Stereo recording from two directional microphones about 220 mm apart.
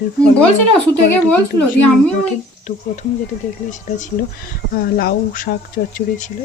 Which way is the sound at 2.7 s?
30° left (ahead or behind).